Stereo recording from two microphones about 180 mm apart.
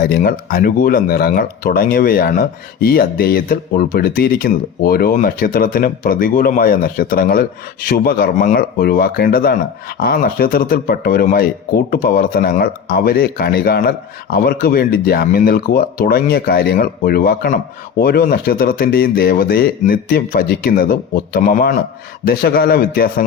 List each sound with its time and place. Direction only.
0.0 s speech: 55° left (ahead or behind)